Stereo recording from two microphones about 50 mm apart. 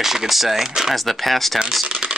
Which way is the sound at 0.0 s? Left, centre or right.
Centre.